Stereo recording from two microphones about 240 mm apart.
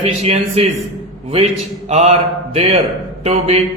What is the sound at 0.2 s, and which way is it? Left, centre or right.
Speech, right.